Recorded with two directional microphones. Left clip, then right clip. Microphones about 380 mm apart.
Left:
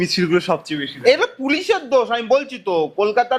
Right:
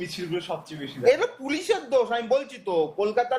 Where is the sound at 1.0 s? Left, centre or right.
Left.